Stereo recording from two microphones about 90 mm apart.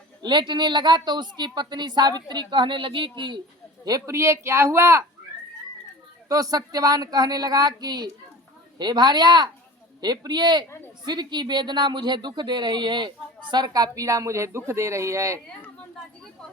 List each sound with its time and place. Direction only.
0.2 s a woman's voice: 60° right (ahead or behind)
3.8 s speech: 40° right (ahead or behind)
6.2 s speech: 40° right (ahead or behind)